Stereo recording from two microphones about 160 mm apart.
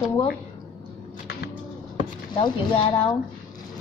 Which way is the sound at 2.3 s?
35° left (ahead or behind).